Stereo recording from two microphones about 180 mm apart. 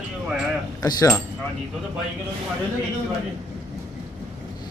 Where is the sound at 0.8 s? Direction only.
20° left (ahead or behind).